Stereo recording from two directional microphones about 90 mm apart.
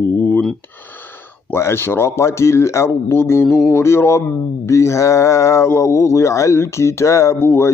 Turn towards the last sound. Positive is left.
turn(degrees=30)  # may be behind; listen again after turning